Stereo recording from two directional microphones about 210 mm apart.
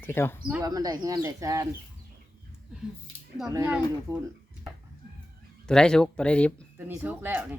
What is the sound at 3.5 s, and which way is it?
Speech, 15° right (ahead or behind).